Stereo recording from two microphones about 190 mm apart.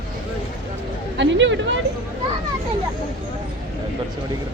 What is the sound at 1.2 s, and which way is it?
Speech, 75° right (ahead or behind).